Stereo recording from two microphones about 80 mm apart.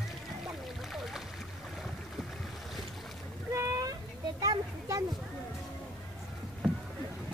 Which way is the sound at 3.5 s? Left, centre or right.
Right.